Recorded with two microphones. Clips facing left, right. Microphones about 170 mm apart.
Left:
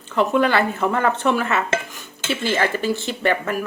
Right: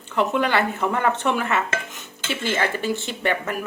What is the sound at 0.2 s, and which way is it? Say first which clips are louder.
Speech: left 3 dB; 20° right (ahead or behind).